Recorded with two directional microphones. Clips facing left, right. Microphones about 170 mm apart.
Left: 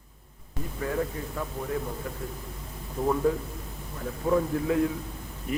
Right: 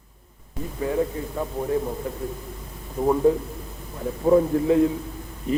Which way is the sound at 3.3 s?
25° right (ahead or behind).